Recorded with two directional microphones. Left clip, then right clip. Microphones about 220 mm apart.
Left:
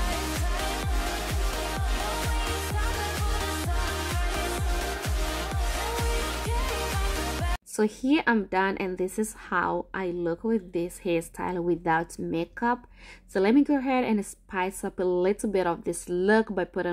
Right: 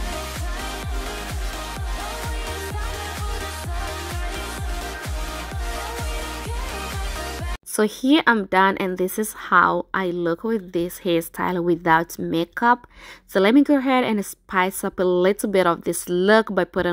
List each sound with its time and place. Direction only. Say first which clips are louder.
7.7 s a woman's voice: right 7 dB; 20° right (ahead or behind)